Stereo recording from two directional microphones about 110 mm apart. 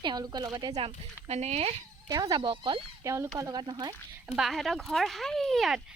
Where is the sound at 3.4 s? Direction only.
40° right (ahead or behind).